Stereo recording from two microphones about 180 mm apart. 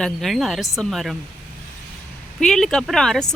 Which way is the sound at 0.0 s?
Centre (ahead or behind).